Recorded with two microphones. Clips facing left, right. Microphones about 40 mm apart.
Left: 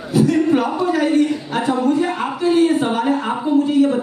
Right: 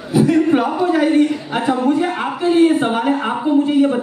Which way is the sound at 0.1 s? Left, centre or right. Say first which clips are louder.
Right 1 dB; centre.